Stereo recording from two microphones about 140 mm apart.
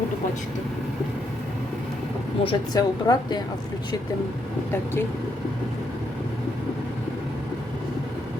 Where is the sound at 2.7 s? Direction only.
30° left (ahead or behind).